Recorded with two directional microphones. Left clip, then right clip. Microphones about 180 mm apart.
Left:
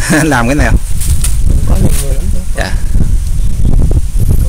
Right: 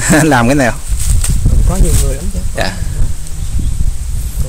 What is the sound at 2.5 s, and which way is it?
Speech, 10° right (ahead or behind).